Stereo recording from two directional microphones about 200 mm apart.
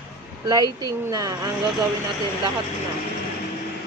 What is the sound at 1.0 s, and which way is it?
Speech, 20° right (ahead or behind).